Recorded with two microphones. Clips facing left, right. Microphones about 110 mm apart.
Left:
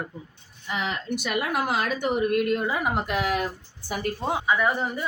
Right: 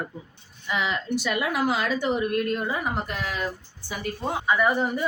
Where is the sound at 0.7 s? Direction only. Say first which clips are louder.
Right 2 dB; 45° left (ahead or behind); by 3.4 s 70° left (ahead or behind).